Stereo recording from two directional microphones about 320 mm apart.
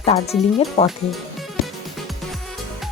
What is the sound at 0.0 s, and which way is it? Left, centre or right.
Speech, centre.